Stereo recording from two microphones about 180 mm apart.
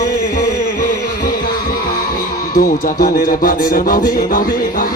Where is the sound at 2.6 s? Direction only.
50° left (ahead or behind).